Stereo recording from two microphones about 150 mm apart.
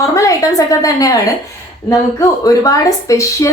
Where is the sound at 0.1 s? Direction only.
20° left (ahead or behind).